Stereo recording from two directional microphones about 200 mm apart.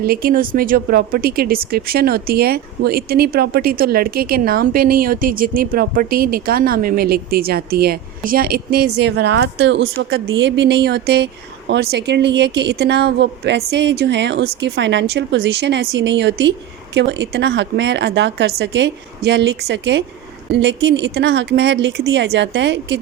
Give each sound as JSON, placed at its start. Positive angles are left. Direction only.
{"t": 0.0, "sound": "speech", "side_deg": -45}